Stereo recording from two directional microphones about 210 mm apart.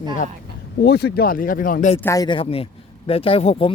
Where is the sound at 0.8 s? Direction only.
50° left (ahead or behind).